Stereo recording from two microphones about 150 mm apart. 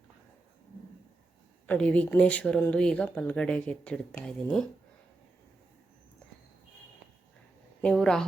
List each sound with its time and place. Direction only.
1.6 s speech: 10° left (ahead or behind)
7.8 s a woman's voice: 5° left (ahead or behind)